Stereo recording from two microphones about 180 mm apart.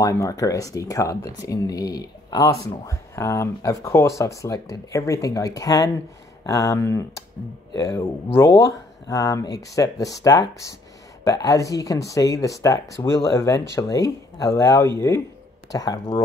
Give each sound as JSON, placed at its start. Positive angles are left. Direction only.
{"t": 0.0, "sound": "speech", "side_deg": 15}